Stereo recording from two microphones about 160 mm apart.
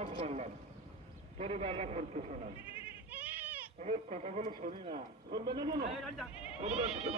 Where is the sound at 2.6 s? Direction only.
10° right (ahead or behind).